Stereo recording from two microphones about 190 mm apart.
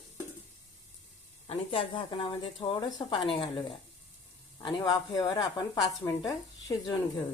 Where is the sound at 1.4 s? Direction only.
30° left (ahead or behind).